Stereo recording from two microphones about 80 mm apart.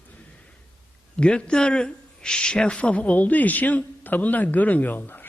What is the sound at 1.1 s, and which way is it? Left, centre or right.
A man's voice, centre.